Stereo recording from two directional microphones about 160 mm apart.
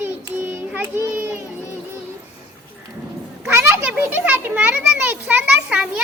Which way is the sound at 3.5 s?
15° right (ahead or behind).